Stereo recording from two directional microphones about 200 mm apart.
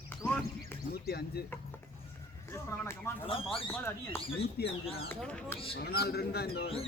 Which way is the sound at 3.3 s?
25° left (ahead or behind).